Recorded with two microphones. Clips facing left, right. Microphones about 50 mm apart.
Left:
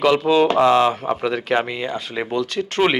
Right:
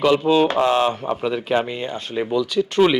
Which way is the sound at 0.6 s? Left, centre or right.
Left.